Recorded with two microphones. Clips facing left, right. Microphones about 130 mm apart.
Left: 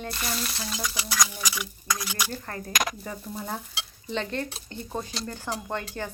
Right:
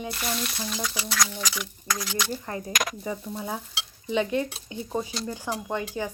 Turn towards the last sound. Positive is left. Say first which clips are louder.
# right 3 dB
turn(degrees=-15)  # may be behind; listen again after turning